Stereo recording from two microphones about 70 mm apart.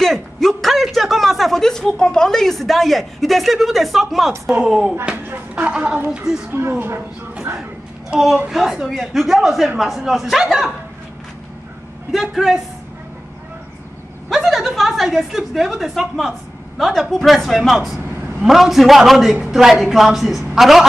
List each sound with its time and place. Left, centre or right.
0.0 s a sound: centre
4.6 s speech: centre
5.0 s a sound: right
5.7 s speech: centre
6.5 s speech: right
7.5 s a sound: right
8.5 s speech: centre
12.1 s speech: centre
14.3 s a woman's voice: centre